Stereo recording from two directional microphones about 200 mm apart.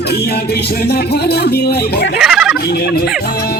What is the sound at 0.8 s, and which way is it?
Speech, 55° left (ahead or behind).